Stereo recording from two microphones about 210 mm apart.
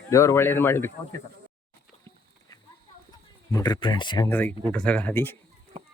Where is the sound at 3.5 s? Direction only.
15° left (ahead or behind).